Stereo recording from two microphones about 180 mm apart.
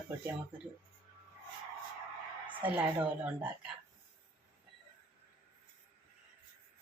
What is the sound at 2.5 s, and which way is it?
Speech, 10° right (ahead or behind).